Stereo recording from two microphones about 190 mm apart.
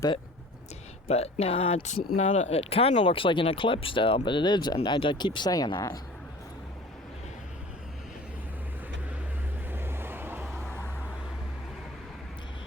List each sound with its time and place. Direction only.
1.0 s speech: 35° left (ahead or behind)
9.7 s vehicle: 10° right (ahead or behind)